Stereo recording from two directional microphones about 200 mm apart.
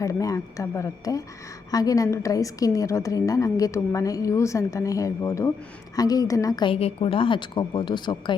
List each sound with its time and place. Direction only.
0.0 s a woman's voice: 15° left (ahead or behind)